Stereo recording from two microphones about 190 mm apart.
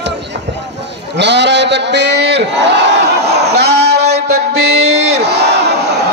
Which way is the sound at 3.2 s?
60° right (ahead or behind).